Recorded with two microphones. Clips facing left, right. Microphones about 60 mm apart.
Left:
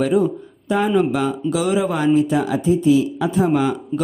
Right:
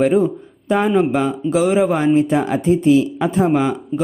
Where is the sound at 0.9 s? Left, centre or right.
Right.